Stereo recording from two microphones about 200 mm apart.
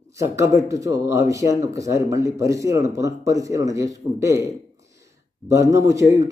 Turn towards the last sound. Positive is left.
turn(degrees=-15)  # may be behind; listen again after turning